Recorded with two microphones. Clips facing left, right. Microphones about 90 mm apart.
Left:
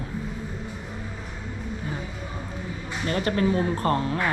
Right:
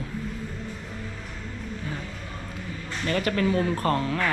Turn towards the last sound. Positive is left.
turn(degrees=20)  # may be behind; listen again after turning